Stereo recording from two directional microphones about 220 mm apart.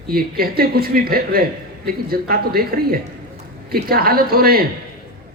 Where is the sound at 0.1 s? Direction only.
40° right (ahead or behind).